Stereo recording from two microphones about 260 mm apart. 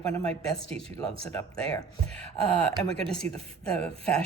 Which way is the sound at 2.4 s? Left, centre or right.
Centre.